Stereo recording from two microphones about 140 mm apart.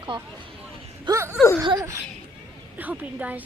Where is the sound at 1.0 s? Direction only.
20° right (ahead or behind).